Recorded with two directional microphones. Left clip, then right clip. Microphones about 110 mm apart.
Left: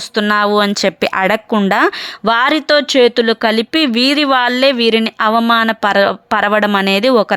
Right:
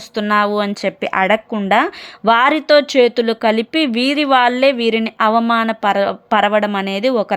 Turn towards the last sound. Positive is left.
turn(degrees=30)  # may be behind; listen again after turning